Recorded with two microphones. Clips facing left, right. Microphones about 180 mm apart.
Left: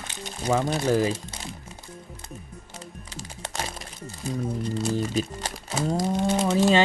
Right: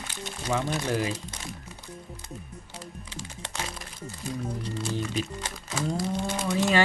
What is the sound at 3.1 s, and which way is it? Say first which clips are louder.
Music: left 4 dB; 40° left (ahead or behind).